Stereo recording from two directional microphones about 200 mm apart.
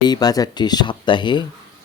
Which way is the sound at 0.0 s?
20° left (ahead or behind).